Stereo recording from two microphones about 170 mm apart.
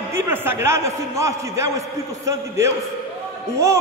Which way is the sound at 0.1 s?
15° right (ahead or behind).